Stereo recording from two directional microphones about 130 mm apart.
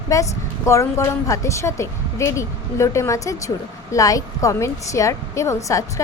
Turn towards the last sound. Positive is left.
turn(degrees=25)  # may be behind; listen again after turning